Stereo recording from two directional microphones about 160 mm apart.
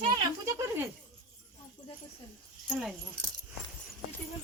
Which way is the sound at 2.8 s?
Centre (ahead or behind).